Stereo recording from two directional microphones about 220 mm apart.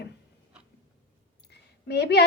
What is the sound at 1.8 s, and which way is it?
Speech, 50° left (ahead or behind).